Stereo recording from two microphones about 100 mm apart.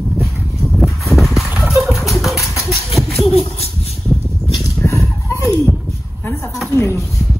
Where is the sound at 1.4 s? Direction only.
15° right (ahead or behind).